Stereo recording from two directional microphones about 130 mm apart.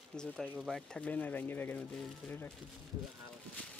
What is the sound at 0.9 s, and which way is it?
Speech, 10° left (ahead or behind).